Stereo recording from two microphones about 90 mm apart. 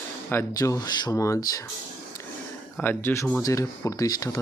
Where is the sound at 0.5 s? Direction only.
40° left (ahead or behind).